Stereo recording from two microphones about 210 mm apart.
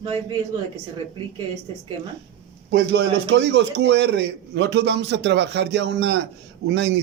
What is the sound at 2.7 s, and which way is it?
A man's voice, 55° right (ahead or behind).